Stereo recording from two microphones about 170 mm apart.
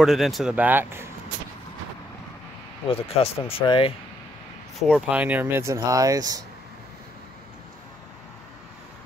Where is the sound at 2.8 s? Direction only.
35° left (ahead or behind).